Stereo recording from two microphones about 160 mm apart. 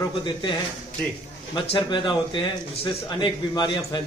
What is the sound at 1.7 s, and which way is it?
A man's voice, 30° left (ahead or behind).